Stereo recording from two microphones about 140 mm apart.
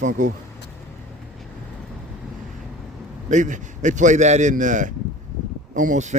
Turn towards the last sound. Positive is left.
turn(degrees=-60)  # may be behind; listen again after turning